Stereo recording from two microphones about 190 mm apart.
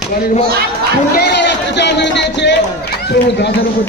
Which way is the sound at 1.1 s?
60° left (ahead or behind).